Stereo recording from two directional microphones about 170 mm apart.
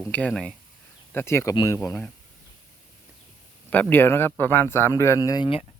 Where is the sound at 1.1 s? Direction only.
15° left (ahead or behind).